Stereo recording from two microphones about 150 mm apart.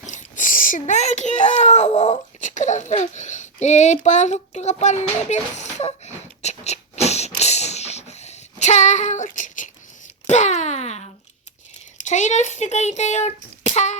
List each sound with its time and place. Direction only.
0.0 s a child's voice: 55° left (ahead or behind)